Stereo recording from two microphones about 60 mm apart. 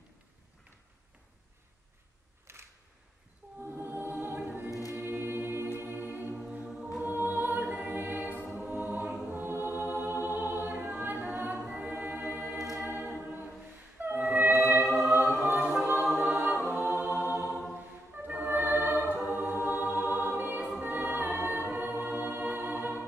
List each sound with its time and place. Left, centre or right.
2.5 s a sound: right
3.6 s choir: right
4.6 s choir: left
4.9 s choir: right
5.8 s music: right
9.3 s choir: right
9.8 s a capella: right
12.8 s choir: right
13.9 s music: right
14.8 s music: centre
15.4 s music: right
15.7 s a capella: centre
16.2 s a capella: centre; by 17.5 s right
18.2 s music: right